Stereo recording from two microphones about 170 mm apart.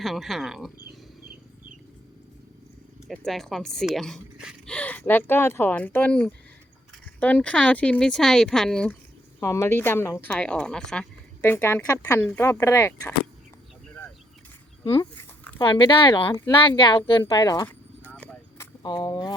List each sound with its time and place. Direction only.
0.0 s speech: centre (ahead or behind)
0.8 s a sound: 60° right (ahead or behind)
3.1 s speech: centre (ahead or behind)
9.4 s speech: 15° left (ahead or behind)
15.5 s a woman's voice: 25° left (ahead or behind)
18.5 s a sound: 20° left (ahead or behind)